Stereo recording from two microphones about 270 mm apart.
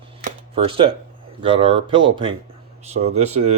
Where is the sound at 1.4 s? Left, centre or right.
Centre.